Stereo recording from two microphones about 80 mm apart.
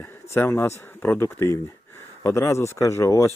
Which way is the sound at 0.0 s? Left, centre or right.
Left.